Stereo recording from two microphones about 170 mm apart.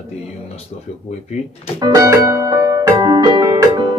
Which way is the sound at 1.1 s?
40° left (ahead or behind).